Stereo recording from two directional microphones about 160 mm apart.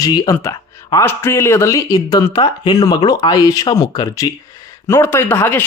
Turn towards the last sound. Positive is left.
turn(degrees=15)  # may be behind; listen again after turning